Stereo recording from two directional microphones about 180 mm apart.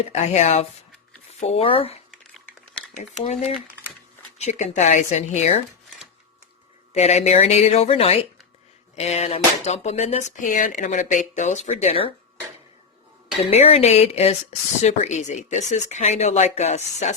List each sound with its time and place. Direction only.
0.0 s speech: 40° left (ahead or behind)
4.4 s speech: 40° left (ahead or behind)
6.9 s speech: 35° left (ahead or behind)
13.5 s speech: 35° left (ahead or behind)